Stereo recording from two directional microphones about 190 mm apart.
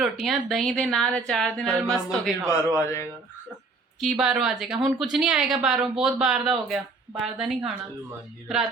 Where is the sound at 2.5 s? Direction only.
15° left (ahead or behind).